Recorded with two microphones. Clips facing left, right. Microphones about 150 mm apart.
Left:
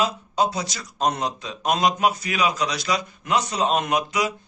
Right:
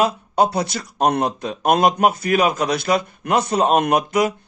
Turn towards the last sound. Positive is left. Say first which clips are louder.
# right 6 dB
turn(degrees=-50)  # may be behind; listen again after turning